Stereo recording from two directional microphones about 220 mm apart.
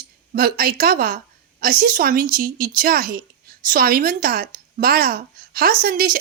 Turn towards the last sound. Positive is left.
turn(degrees=-40)  # may be behind; listen again after turning